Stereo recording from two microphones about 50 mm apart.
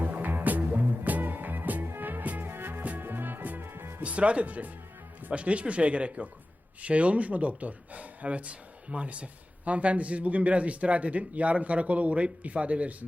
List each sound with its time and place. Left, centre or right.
0.0 s music: right
4.0 s speech: right